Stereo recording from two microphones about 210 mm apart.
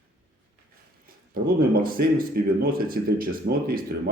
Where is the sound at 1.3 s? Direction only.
45° right (ahead or behind).